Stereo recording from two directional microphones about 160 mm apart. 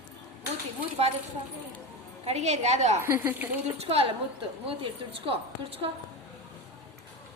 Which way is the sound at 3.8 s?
40° right (ahead or behind).